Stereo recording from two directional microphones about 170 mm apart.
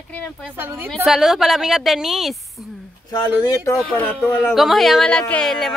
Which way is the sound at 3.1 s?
25° left (ahead or behind).